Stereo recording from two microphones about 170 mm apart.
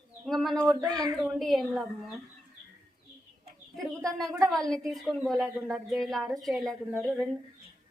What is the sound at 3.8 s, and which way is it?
A woman's voice, centre (ahead or behind).